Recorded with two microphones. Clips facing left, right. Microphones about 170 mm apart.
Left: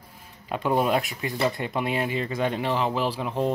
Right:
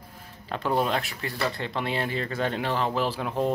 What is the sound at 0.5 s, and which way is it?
Speech, 10° left (ahead or behind).